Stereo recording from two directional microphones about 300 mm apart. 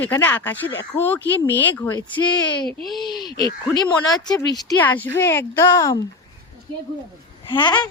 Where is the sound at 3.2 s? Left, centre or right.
Centre.